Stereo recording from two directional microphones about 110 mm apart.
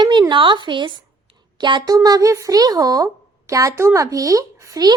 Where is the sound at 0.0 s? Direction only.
45° right (ahead or behind).